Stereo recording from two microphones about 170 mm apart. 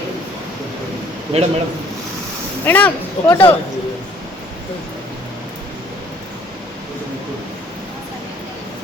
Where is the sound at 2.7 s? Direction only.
10° left (ahead or behind).